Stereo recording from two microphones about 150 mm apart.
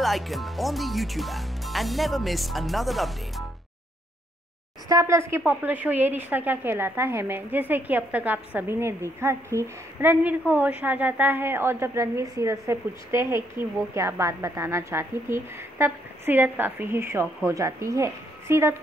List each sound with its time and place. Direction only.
0.0 s speech: centre (ahead or behind)
4.8 s a woman's voice: 20° right (ahead or behind)